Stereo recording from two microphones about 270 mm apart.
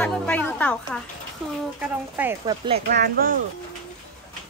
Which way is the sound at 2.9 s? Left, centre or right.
Right.